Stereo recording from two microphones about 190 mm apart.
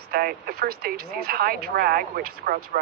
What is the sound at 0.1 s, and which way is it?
Speech, 50° right (ahead or behind).